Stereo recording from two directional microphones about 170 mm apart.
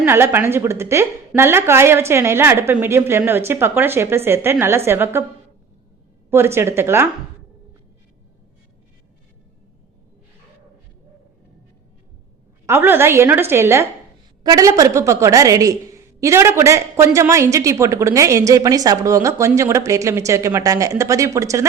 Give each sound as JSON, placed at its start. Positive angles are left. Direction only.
{"t": 0.0, "sound": "a woman's voice", "side_deg": -15}
{"t": 6.3, "sound": "a woman's voice", "side_deg": -15}
{"t": 12.6, "sound": "a woman's voice", "side_deg": -15}